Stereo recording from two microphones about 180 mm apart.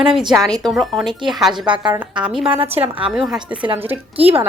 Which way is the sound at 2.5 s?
30° right (ahead or behind).